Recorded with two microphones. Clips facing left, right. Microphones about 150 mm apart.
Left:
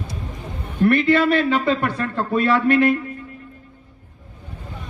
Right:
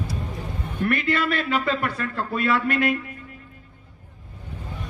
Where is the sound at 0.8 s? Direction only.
30° left (ahead or behind).